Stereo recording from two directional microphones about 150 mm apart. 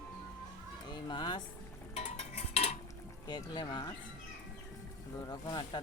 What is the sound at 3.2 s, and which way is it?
Speech, 30° left (ahead or behind).